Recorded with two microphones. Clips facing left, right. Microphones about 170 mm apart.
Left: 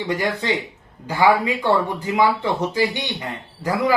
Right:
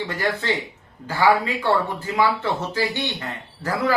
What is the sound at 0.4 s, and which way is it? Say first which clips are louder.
Speech: left 2 dB; 15° left (ahead or behind).